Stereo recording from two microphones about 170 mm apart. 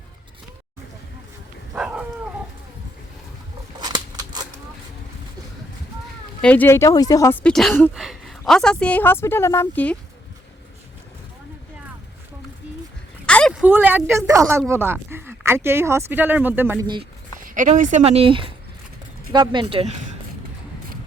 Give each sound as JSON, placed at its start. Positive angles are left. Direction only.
{"t": 1.7, "sound": "a sound", "side_deg": -5}
{"t": 3.8, "sound": "a sound", "side_deg": -25}
{"t": 6.4, "sound": "a woman's voice", "side_deg": 10}
{"t": 7.4, "sound": "a woman's voice", "side_deg": 5}
{"t": 13.2, "sound": "a sound", "side_deg": 5}
{"t": 13.5, "sound": "speech", "side_deg": -10}
{"t": 16.8, "sound": "speech", "side_deg": -25}
{"t": 17.4, "sound": "speech", "side_deg": -50}
{"t": 18.0, "sound": "speech", "side_deg": -35}